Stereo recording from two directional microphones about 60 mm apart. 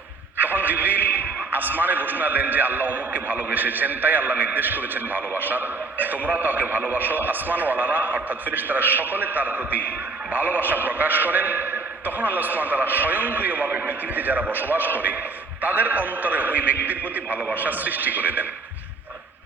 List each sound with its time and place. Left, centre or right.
0.3 s music: right
1.5 s a man's voice: right